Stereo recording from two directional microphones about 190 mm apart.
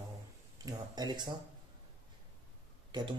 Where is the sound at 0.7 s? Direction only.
20° right (ahead or behind).